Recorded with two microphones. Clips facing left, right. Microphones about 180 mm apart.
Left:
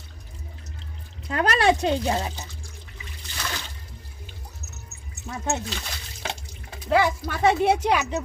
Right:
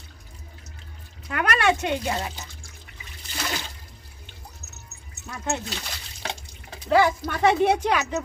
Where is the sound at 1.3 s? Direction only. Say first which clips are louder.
Left 2 dB; 30° left (ahead or behind).